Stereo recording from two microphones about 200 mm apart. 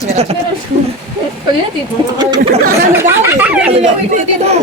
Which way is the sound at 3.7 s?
35° right (ahead or behind).